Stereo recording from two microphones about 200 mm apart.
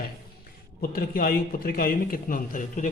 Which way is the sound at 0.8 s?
45° left (ahead or behind).